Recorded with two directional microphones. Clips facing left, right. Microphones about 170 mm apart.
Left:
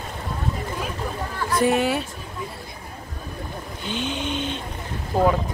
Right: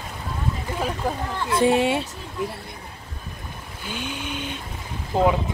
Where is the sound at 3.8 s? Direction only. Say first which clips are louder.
Left 4 dB; 10° right (ahead or behind).